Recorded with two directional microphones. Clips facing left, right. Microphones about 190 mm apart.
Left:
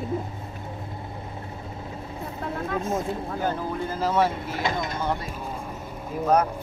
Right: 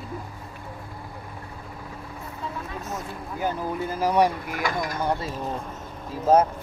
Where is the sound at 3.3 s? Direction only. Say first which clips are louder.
Right 3 dB; 10° right (ahead or behind).